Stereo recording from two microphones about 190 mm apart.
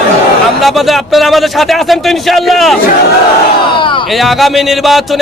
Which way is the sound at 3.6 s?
25° left (ahead or behind).